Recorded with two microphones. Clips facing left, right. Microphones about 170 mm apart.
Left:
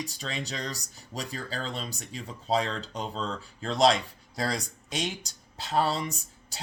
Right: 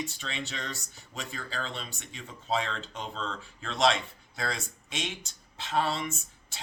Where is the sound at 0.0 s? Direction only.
40° left (ahead or behind).